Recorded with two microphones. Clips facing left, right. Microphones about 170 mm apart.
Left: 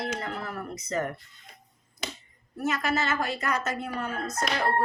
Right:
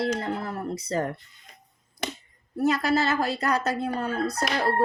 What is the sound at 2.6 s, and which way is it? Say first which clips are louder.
A woman's voice: right 5 dB; 35° right (ahead or behind).